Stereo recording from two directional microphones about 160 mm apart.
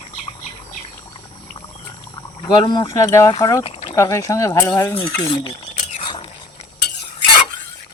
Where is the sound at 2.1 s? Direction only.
30° left (ahead or behind).